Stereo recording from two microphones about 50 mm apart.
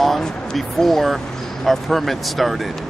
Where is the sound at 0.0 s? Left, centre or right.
Centre.